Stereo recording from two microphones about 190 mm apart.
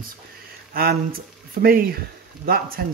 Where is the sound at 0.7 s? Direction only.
50° right (ahead or behind).